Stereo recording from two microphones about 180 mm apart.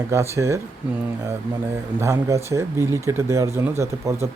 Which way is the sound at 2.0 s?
15° right (ahead or behind).